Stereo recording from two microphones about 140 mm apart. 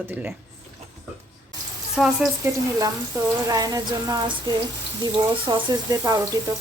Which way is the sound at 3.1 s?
20° right (ahead or behind).